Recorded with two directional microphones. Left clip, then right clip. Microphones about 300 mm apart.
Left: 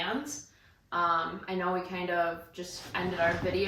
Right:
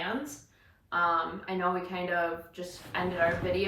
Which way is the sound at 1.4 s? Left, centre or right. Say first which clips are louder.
Right 1 dB; centre.